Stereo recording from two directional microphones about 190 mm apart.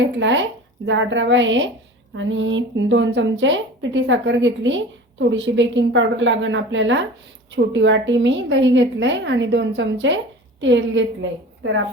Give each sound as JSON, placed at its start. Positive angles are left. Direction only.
{"t": 0.0, "sound": "a woman's voice", "side_deg": -75}